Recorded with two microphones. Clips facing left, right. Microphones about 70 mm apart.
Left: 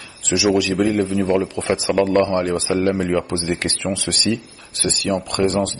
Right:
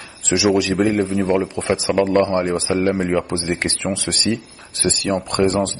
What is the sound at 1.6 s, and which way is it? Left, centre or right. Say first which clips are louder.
Speech: even; centre.